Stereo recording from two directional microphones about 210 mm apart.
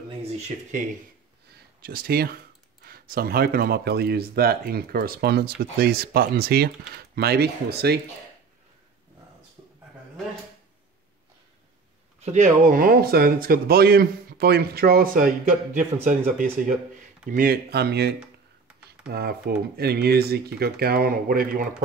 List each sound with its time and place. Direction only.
0.2 s speech: 35° right (ahead or behind)
1.8 s speech: 45° right (ahead or behind)
12.3 s speech: 35° right (ahead or behind); by 18.1 s 50° right (ahead or behind)
19.1 s speech: 50° right (ahead or behind)